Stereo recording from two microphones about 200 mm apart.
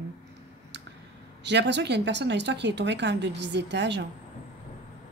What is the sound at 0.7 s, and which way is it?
Clicking, 60° right (ahead or behind).